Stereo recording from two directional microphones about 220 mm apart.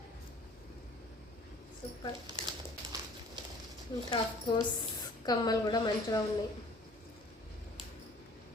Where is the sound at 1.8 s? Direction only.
25° left (ahead or behind).